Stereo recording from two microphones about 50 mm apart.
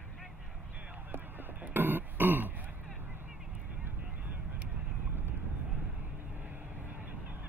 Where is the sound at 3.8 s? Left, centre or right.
Right.